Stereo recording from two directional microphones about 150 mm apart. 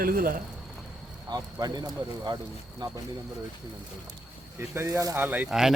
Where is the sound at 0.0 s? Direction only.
70° right (ahead or behind).